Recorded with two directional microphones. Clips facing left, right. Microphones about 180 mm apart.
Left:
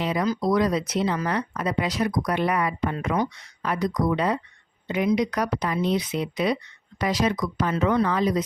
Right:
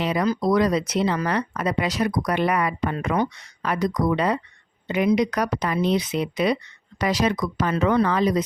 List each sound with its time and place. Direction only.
0.0 s speech: 70° right (ahead or behind)